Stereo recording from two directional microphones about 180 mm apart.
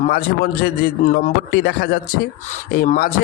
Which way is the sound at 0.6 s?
50° left (ahead or behind).